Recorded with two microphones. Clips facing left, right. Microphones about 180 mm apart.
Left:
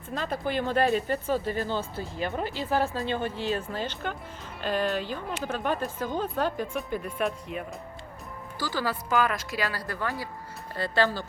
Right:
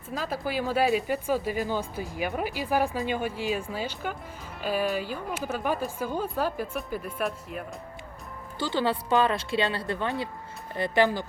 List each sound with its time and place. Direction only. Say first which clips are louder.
0.1 s speech: left 1 dB; 5° right (ahead or behind)
8.5 s speech: right 4 dB; 25° right (ahead or behind)